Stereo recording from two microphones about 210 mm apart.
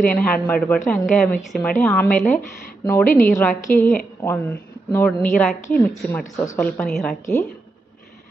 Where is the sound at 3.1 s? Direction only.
40° left (ahead or behind).